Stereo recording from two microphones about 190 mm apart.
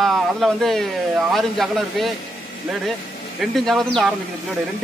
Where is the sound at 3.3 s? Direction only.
Centre (ahead or behind).